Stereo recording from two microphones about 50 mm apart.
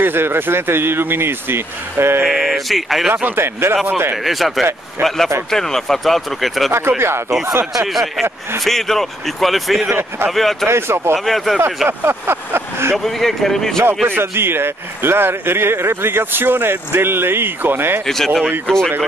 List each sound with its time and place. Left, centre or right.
0.0 s speech: right
2.3 s speech: centre
3.3 s speech: right
4.2 s speech: centre
6.7 s speech: right
7.9 s speech: centre
9.8 s speech: right
10.3 s speech: centre
10.7 s speech: right
11.1 s speech: centre
12.0 s vehicle: right
12.9 s speech: centre
14.0 s speech: right
18.0 s speech: centre